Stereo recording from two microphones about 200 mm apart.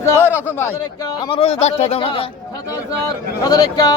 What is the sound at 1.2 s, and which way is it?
Speech, 30° left (ahead or behind).